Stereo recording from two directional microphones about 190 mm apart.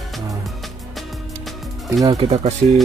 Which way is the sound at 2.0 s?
30° right (ahead or behind).